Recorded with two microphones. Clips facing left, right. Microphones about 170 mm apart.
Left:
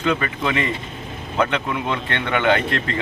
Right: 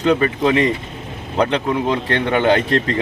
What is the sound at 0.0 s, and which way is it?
A man's voice, 35° right (ahead or behind).